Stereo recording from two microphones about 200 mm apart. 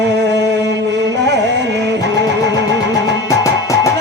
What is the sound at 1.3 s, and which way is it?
Carnatic music, 60° right (ahead or behind).